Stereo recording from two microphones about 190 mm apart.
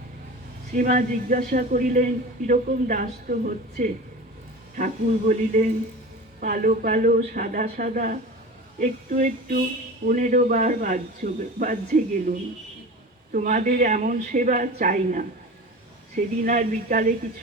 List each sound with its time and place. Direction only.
0.7 s speech: 45° right (ahead or behind)
13.3 s speech: 45° right (ahead or behind)